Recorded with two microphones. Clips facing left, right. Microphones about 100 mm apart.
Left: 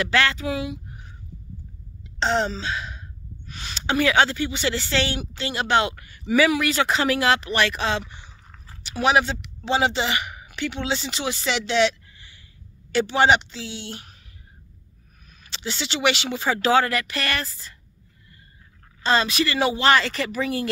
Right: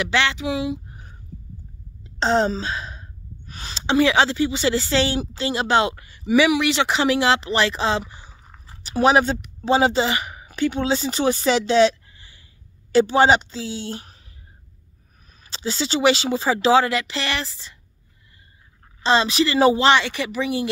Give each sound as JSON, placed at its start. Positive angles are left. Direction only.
{"t": 0.0, "sound": "speech", "side_deg": -20}
{"t": 2.1, "sound": "speech", "side_deg": -35}
{"t": 8.3, "sound": "a sound", "side_deg": -15}
{"t": 8.8, "sound": "a woman's voice", "side_deg": -35}
{"t": 15.5, "sound": "speech", "side_deg": -35}
{"t": 19.0, "sound": "speech", "side_deg": -25}
{"t": 19.9, "sound": "speech", "side_deg": -15}